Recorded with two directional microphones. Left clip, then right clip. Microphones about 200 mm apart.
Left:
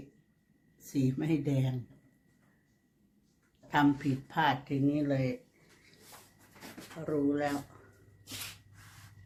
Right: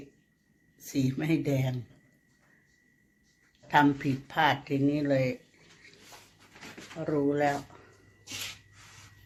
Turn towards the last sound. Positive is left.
turn(degrees=-20)  # may be behind; listen again after turning